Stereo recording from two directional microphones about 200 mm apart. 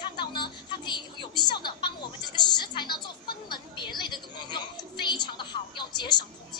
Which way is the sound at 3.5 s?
20° left (ahead or behind).